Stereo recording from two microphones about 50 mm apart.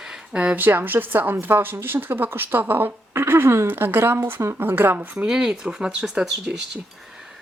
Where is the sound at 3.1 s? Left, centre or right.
Right.